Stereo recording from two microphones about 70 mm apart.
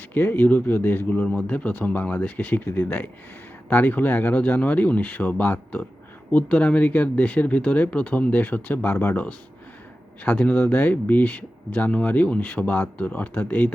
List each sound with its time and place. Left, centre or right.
0.1 s speech: left